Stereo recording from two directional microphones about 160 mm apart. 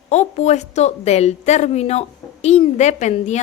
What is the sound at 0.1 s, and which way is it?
A woman's voice, 45° left (ahead or behind).